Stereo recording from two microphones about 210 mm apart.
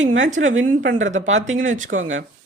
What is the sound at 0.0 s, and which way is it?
Speech, 65° right (ahead or behind).